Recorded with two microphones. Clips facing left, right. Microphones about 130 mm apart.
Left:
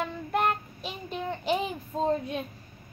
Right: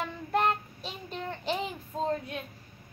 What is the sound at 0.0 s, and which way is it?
Child singing, 5° left (ahead or behind).